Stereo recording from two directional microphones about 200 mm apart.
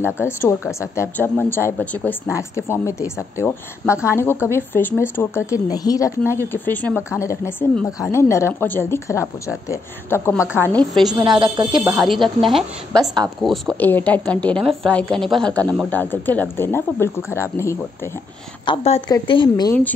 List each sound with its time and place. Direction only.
0.7 s speech: 15° left (ahead or behind)
10.4 s a woman's voice: 5° right (ahead or behind)
10.7 s speech: 5° left (ahead or behind)
11.1 s a woman's voice: 20° right (ahead or behind)
12.1 s a woman's voice: centre (ahead or behind)
18.7 s a woman's voice: 25° left (ahead or behind)